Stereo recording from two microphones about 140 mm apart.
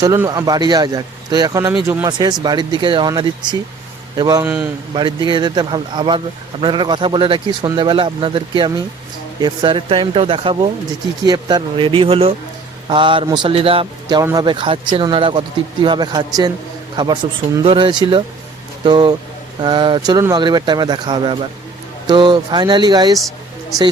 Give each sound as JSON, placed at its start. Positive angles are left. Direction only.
{"t": 0.3, "sound": "a man's voice", "side_deg": -25}
{"t": 1.7, "sound": "speech", "side_deg": -15}
{"t": 2.0, "sound": "a man's voice", "side_deg": -30}
{"t": 4.4, "sound": "speech", "side_deg": -15}
{"t": 4.9, "sound": "speech", "side_deg": -35}